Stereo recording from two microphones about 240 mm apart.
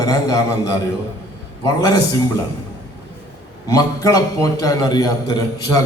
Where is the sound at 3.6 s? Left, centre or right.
Centre.